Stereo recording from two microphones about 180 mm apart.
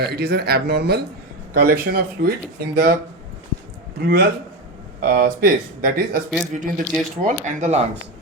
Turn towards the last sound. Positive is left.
turn(degrees=-40)  # may be behind; listen again after turning